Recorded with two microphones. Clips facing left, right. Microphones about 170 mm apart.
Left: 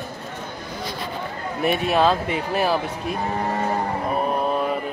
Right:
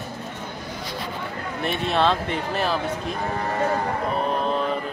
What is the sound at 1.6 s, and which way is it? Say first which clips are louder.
Speech: left 3 dB; 10° left (ahead or behind).